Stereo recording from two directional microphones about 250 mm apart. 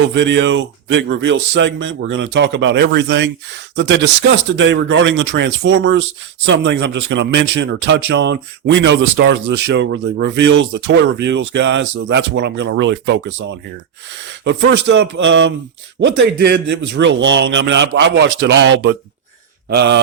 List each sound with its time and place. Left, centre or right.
0.0 s speech: right